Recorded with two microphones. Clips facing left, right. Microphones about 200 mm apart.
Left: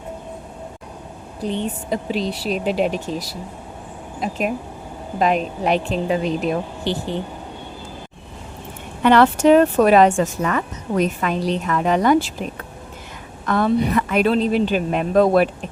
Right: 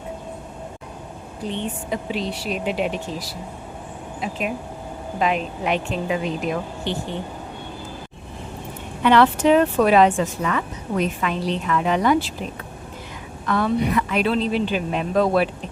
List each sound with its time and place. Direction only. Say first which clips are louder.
1.9 s a woman's voice: left 4 dB; 35° left (ahead or behind)
9.0 s speech: left 3 dB; 45° left (ahead or behind)
13.4 s speech: left 3 dB; 45° left (ahead or behind)